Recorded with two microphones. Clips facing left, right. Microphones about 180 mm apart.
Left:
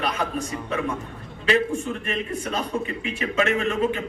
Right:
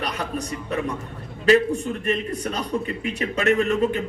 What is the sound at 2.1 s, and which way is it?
A man's voice, 40° right (ahead or behind).